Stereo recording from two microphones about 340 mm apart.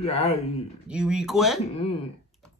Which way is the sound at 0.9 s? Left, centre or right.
Centre.